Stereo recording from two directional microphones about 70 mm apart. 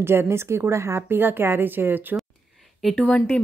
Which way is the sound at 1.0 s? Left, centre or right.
Right.